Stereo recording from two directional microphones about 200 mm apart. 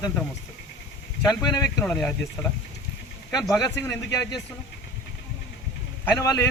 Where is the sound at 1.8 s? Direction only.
10° left (ahead or behind).